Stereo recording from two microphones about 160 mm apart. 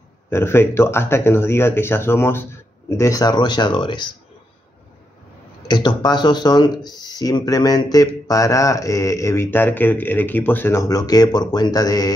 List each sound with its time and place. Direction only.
0.3 s speech: 15° left (ahead or behind)
5.7 s speech: 25° left (ahead or behind)